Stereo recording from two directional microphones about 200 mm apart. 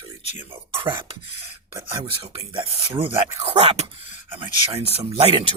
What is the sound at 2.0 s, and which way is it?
Speech, 30° right (ahead or behind).